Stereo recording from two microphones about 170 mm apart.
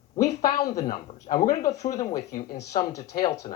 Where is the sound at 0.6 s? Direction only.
20° left (ahead or behind).